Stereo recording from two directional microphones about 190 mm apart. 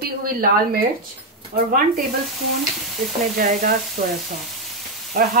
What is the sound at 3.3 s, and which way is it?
Frying, 50° right (ahead or behind).